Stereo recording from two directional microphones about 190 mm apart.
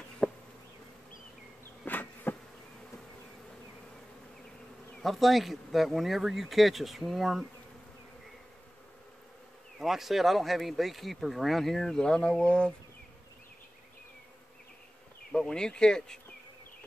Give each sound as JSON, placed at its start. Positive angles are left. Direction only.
{"t": 0.2, "sound": "bee", "side_deg": 5}
{"t": 1.9, "sound": "insect", "side_deg": 10}
{"t": 4.9, "sound": "speech", "side_deg": 0}
{"t": 9.8, "sound": "speech", "side_deg": 0}
{"t": 15.3, "sound": "speech", "side_deg": 5}